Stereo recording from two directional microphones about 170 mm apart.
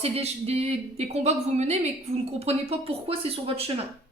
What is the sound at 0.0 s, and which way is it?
A woman's voice, 35° right (ahead or behind).